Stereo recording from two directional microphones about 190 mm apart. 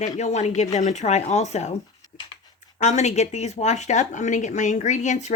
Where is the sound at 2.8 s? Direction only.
40° left (ahead or behind).